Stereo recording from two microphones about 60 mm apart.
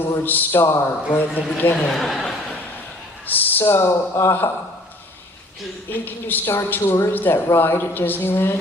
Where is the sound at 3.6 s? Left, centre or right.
Left.